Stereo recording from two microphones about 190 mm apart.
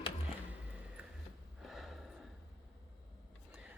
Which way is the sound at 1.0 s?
5° right (ahead or behind).